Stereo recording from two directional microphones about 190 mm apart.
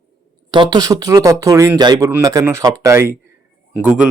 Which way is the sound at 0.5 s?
25° right (ahead or behind).